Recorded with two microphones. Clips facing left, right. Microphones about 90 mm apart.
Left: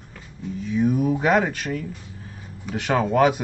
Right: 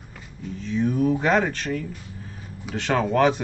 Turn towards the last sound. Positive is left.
turn(degrees=10)  # may be behind; listen again after turning